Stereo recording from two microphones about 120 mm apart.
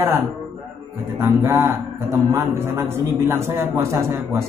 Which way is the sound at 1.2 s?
25° right (ahead or behind).